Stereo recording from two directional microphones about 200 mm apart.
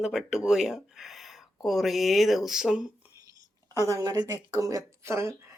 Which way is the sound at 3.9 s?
20° right (ahead or behind).